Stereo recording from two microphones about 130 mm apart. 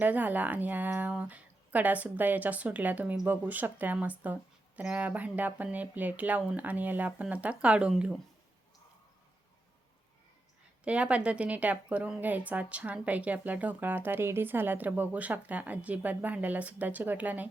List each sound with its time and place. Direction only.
0.0 s a woman's voice: 15° right (ahead or behind)
10.8 s a woman's voice: 10° right (ahead or behind)